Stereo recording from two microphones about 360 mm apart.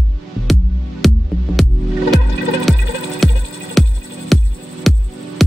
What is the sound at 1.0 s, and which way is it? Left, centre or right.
Music, centre.